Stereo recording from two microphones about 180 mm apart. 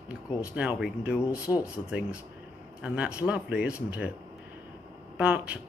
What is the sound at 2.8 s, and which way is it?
Speech, 5° right (ahead or behind).